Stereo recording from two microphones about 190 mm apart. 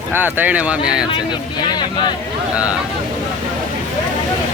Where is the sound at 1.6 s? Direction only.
25° left (ahead or behind).